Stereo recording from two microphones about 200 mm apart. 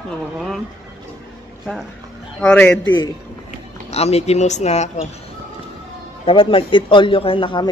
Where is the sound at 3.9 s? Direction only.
30° left (ahead or behind).